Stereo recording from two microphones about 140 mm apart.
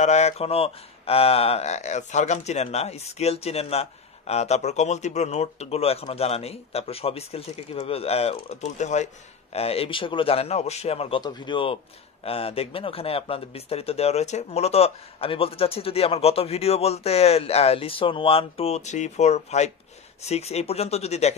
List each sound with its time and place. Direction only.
0.0 s speech: 55° left (ahead or behind)